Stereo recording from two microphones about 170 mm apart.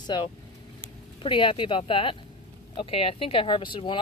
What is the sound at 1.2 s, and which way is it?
Speech, 30° left (ahead or behind).